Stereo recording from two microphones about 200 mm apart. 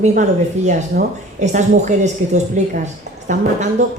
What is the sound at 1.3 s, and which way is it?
A man's voice, 35° right (ahead or behind).